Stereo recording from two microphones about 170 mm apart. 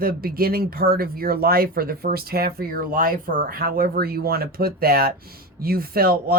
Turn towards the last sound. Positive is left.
turn(degrees=-60)  # may be behind; listen again after turning